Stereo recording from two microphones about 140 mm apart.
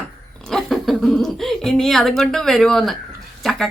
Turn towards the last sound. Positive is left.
turn(degrees=0)  # may be behind; listen again after turning